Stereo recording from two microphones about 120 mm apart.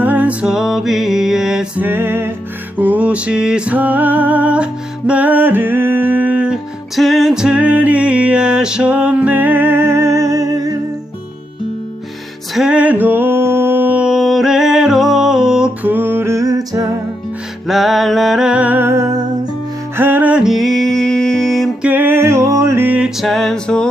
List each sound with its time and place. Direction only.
0.0 s music: 15° right (ahead or behind)
1.8 s music: 20° right (ahead or behind)
12.5 s a sound: 10° right (ahead or behind); by 16.8 s 30° right (ahead or behind)
17.7 s music: centre (ahead or behind)
21.8 s music: 15° right (ahead or behind); by 23.9 s 5° left (ahead or behind)